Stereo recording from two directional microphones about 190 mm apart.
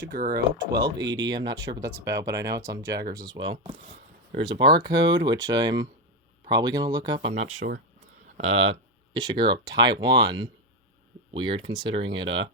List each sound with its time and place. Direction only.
0.1 s speech: 50° right (ahead or behind)
0.8 s speech: 20° right (ahead or behind)